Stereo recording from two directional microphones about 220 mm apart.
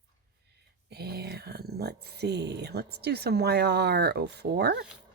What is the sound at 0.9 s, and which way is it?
Speech, 45° right (ahead or behind).